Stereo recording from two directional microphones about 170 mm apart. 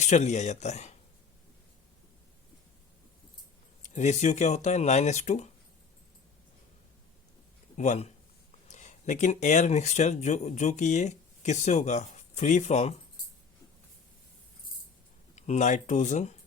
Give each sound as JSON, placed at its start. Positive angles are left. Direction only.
{"t": 0.0, "sound": "speech", "side_deg": 45}
{"t": 3.9, "sound": "speech", "side_deg": 45}
{"t": 7.8, "sound": "speech", "side_deg": 40}
{"t": 15.4, "sound": "speech", "side_deg": 45}